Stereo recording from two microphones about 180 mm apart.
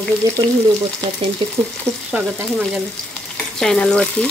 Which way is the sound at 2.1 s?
Centre (ahead or behind).